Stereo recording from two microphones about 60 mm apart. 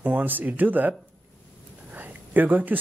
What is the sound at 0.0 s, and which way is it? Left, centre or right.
Speech, right.